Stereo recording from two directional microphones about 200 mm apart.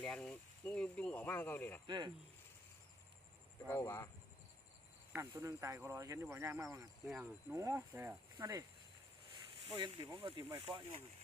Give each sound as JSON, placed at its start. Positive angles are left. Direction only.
{"t": 0.0, "sound": "speech", "side_deg": 5}
{"t": 1.9, "sound": "speech", "side_deg": -20}
{"t": 3.7, "sound": "speech", "side_deg": 15}
{"t": 5.1, "sound": "speech", "side_deg": -15}
{"t": 9.6, "sound": "speech", "side_deg": -20}